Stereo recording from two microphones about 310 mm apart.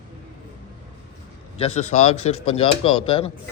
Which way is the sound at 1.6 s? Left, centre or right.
Left.